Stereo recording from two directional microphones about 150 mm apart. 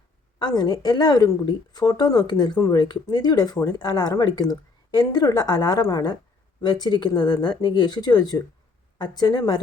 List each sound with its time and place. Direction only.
0.3 s a woman's voice: 25° left (ahead or behind)